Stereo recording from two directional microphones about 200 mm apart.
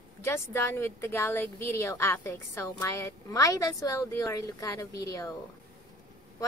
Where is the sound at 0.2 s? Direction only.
15° left (ahead or behind).